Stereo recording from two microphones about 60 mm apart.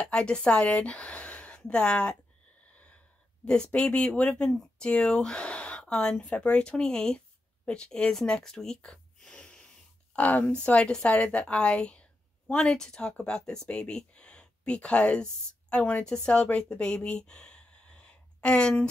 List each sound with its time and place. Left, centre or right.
0.0 s a woman's voice: centre
3.4 s speech: centre
10.1 s speech: left